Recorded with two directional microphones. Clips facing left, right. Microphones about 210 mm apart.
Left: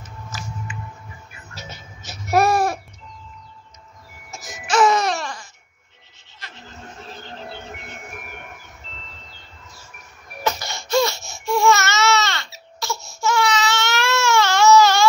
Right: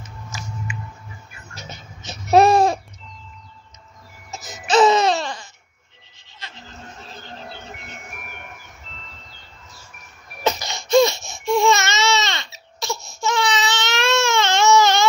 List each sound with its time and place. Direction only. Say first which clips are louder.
2.3 s babbling: right 4 dB; 20° right (ahead or behind)
4.6 s music: right 3 dB; 20° right (ahead or behind)
10.4 s baby cry: right 2 dB; 20° right (ahead or behind)